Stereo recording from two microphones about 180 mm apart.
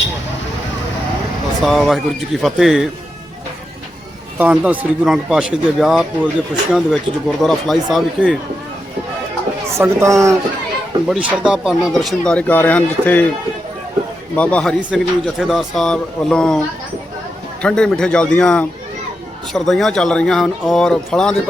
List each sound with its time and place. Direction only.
1.6 s speech: centre (ahead or behind)
4.4 s speech: 10° right (ahead or behind)
9.7 s speech: 15° right (ahead or behind)
11.1 s speech: 5° right (ahead or behind)
14.3 s speech: 5° left (ahead or behind)
17.6 s speech: 5° left (ahead or behind)